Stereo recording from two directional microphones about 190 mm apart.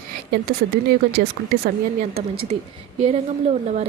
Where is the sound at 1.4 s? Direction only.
65° right (ahead or behind).